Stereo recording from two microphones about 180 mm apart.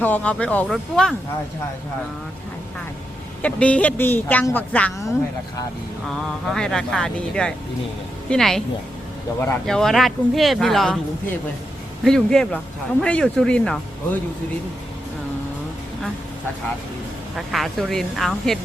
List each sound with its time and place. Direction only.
0.0 s a woman's voice: 10° left (ahead or behind)
3.4 s a woman's voice: 5° left (ahead or behind)
6.1 s speech: centre (ahead or behind)
12.0 s speech: 5° left (ahead or behind)
17.3 s speech: centre (ahead or behind)